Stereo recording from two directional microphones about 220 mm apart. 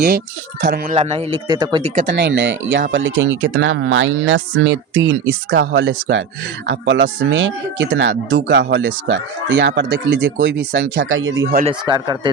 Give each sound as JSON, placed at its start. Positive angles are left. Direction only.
{"t": 0.6, "sound": "speech", "side_deg": -45}
{"t": 0.9, "sound": "speech", "side_deg": -25}
{"t": 2.0, "sound": "speech", "side_deg": -50}
{"t": 11.6, "sound": "speech", "side_deg": -20}